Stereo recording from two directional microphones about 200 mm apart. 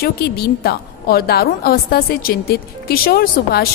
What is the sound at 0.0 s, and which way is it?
A woman's voice, 50° left (ahead or behind).